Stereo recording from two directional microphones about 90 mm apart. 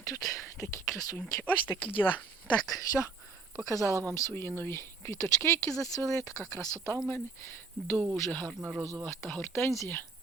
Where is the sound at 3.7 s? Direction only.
35° left (ahead or behind).